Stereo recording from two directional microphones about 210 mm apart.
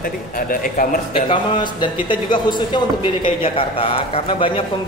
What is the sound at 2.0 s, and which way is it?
A man's voice, 20° left (ahead or behind).